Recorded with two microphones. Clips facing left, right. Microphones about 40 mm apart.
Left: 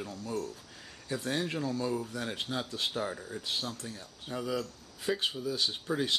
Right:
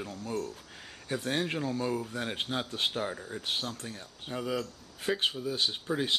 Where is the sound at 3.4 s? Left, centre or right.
Right.